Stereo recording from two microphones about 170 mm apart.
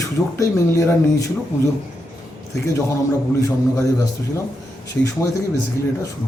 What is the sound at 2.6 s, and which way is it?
Speech, 15° left (ahead or behind).